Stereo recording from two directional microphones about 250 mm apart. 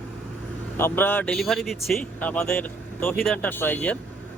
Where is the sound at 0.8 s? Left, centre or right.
Centre.